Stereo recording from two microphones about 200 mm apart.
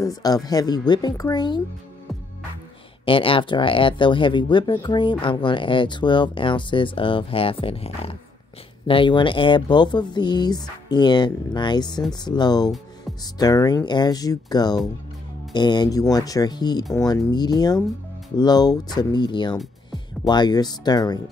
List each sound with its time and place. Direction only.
0.0 s speech: 20° left (ahead or behind)
3.1 s speech: 25° left (ahead or behind)